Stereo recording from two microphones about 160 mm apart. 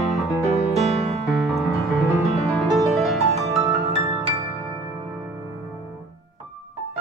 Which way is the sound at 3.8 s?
20° right (ahead or behind).